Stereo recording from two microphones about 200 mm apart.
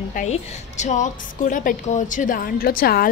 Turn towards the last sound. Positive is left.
turn(degrees=50)  # may be behind; listen again after turning